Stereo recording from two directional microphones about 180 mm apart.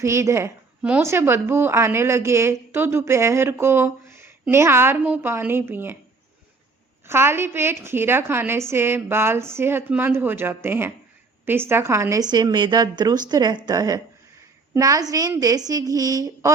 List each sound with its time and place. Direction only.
0.0 s a woman's voice: 15° right (ahead or behind)
7.1 s a woman's voice: 15° right (ahead or behind)